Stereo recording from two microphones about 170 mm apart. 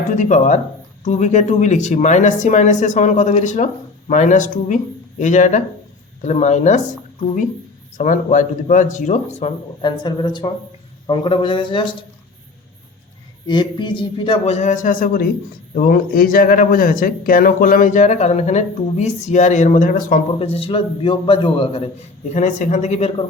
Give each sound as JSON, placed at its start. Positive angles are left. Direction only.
{"t": 0.2, "sound": "speech", "side_deg": 45}
{"t": 7.9, "sound": "speech", "side_deg": 45}
{"t": 9.8, "sound": "a man's voice", "side_deg": 25}
{"t": 13.5, "sound": "a man's voice", "side_deg": 30}
{"t": 20.4, "sound": "a man's voice", "side_deg": 35}
{"t": 22.3, "sound": "speech", "side_deg": 45}